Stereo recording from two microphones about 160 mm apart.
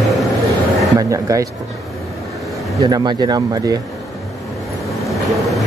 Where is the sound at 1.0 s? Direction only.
20° right (ahead or behind).